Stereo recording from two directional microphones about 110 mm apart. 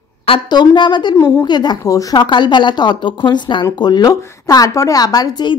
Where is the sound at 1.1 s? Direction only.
30° left (ahead or behind).